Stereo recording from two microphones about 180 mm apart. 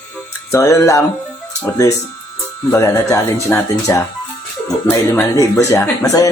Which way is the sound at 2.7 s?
15° left (ahead or behind).